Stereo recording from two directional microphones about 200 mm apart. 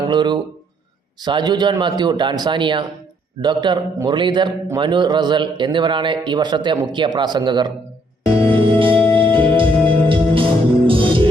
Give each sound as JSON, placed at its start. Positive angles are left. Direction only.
{"t": 0.1, "sound": "a sound", "side_deg": -20}
{"t": 1.2, "sound": "a man's voice", "side_deg": -20}
{"t": 8.4, "sound": "music", "side_deg": -25}